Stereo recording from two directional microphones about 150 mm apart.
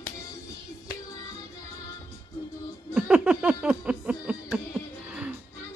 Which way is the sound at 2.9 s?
10° right (ahead or behind).